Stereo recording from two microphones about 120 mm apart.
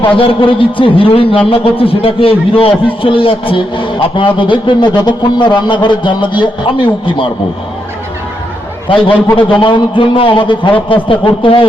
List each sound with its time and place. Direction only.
0.0 s a man's voice: 50° left (ahead or behind)
9.3 s a man's voice: 45° left (ahead or behind)